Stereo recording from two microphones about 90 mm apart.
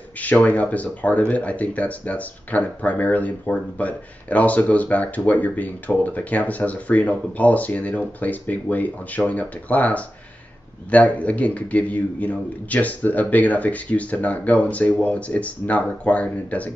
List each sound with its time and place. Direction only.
0.2 s speech: 15° left (ahead or behind)